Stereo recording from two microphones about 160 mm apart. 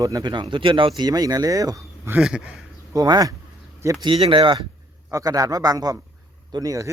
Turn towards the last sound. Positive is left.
turn(degrees=-20)  # may be behind; listen again after turning